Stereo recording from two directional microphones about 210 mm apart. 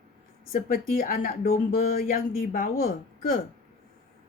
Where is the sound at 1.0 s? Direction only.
45° left (ahead or behind).